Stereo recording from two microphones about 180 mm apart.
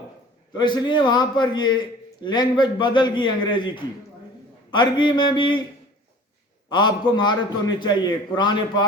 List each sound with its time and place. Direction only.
0.5 s a man's voice: 25° left (ahead or behind)
4.7 s a man's voice: 25° left (ahead or behind)
6.7 s a man's voice: 25° left (ahead or behind)